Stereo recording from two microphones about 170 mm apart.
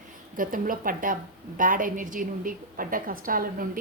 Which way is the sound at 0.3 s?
55° right (ahead or behind).